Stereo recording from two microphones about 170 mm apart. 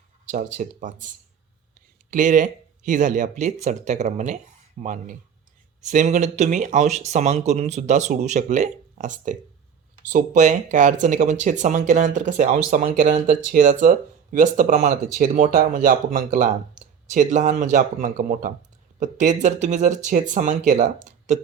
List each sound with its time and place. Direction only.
0.3 s speech: 50° right (ahead or behind)